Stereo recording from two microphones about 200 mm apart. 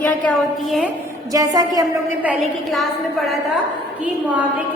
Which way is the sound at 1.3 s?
20° right (ahead or behind).